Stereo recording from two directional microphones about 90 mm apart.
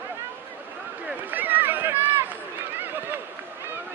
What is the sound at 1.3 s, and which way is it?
Run, 20° right (ahead or behind).